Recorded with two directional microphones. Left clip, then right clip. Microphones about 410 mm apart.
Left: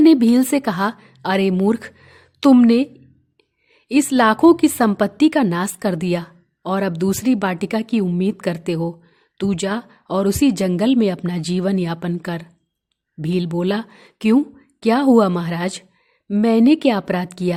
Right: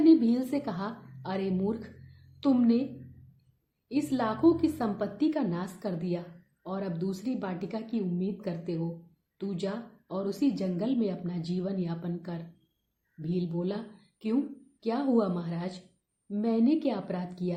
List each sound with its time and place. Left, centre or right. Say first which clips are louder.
0.0 s a woman's voice: left 10 dB; left
3.8 s a woman's voice: left 15 dB; left